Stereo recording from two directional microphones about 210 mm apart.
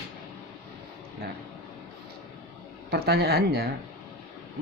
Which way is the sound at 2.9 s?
50° right (ahead or behind).